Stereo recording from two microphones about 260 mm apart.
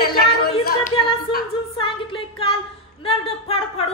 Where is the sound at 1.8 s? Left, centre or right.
Centre.